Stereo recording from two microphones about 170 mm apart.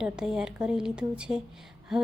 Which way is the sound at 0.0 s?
5° right (ahead or behind).